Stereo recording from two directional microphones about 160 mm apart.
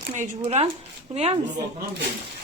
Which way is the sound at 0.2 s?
45° right (ahead or behind).